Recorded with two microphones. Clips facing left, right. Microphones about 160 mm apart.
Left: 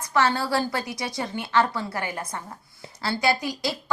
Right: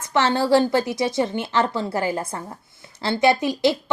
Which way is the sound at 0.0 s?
25° right (ahead or behind).